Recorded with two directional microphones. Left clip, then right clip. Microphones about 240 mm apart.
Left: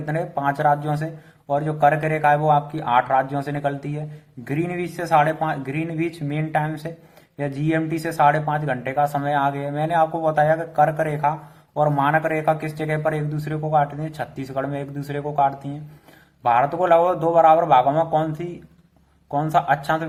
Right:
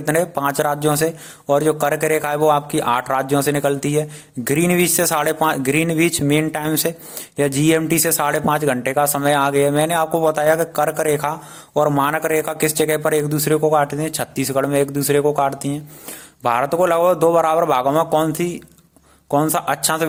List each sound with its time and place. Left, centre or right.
0.0 s speech: right